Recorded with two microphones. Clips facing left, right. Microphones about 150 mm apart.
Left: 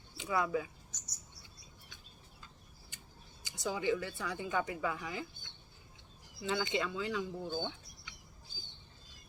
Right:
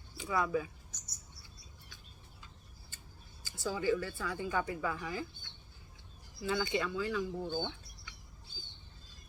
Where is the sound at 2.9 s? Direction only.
15° left (ahead or behind).